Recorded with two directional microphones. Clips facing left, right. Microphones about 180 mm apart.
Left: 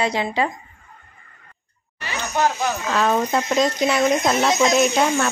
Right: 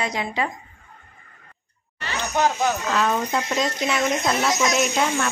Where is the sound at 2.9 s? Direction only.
40° left (ahead or behind).